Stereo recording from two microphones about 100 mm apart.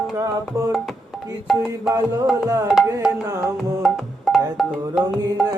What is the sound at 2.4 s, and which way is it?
Music, 35° right (ahead or behind).